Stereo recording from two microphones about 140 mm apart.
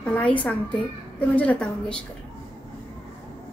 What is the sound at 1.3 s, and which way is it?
Speech, 10° left (ahead or behind).